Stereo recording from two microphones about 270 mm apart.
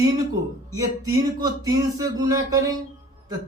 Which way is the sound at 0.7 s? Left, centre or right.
Centre.